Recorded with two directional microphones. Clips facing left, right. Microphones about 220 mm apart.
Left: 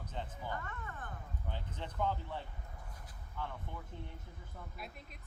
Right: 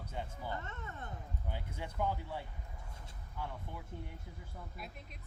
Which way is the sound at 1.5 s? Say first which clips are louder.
Right 1 dB; 10° right (ahead or behind).